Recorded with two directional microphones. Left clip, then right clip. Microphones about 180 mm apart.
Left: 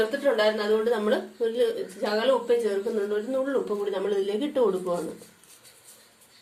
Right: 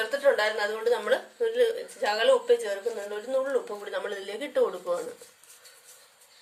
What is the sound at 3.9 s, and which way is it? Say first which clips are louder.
A woman's voice: left 4 dB; 20° right (ahead or behind).